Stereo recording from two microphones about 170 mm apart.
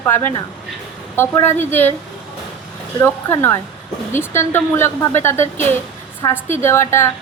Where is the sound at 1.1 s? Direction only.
15° left (ahead or behind).